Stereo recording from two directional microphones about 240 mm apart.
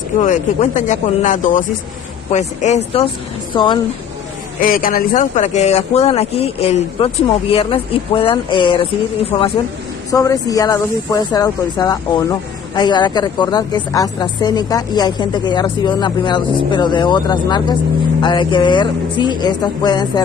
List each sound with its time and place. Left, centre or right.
0.2 s speech: left
4.6 s speech: left; by 20.1 s centre